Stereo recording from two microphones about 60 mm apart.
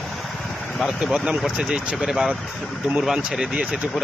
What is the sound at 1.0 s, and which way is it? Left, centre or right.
Speech, centre.